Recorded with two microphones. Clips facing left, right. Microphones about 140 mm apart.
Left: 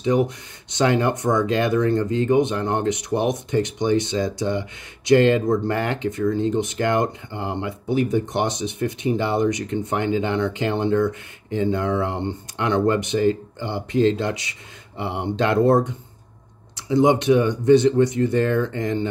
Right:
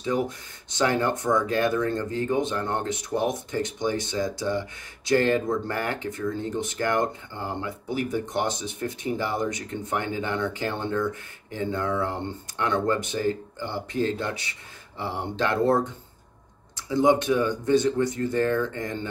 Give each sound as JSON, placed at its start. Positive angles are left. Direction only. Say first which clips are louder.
{"t": 0.0, "sound": "speech", "louder": "left 6 dB", "side_deg": 20}
{"t": 15.0, "sound": "speech", "louder": "left 4 dB", "side_deg": 65}
{"t": 15.5, "sound": "speech", "louder": "left 5 dB", "side_deg": 20}
{"t": 16.9, "sound": "speech", "louder": "left 4 dB", "side_deg": 20}